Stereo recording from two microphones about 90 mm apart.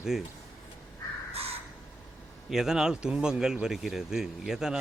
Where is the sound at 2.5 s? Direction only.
5° right (ahead or behind).